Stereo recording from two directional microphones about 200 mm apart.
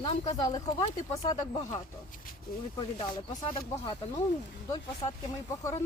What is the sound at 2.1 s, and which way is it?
Speech, 45° left (ahead or behind).